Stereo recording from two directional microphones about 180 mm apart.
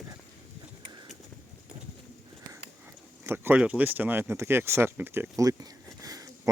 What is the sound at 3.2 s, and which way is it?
Speech, 15° right (ahead or behind).